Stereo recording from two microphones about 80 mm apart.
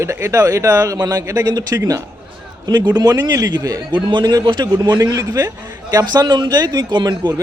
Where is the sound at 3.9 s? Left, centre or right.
Right.